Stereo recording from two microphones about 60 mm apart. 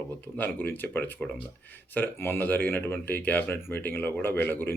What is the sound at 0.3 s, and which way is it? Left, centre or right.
Speech, left.